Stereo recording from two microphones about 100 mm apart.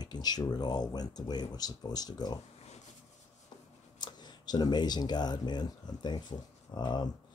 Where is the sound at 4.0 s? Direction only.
45° left (ahead or behind).